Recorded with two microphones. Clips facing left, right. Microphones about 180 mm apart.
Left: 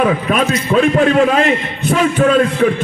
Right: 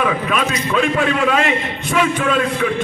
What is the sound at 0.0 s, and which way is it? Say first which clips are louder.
A man's voice: left 4 dB; 40° left (ahead or behind).